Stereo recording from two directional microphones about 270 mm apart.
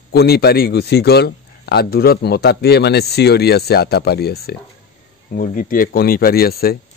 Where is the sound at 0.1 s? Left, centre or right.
Left.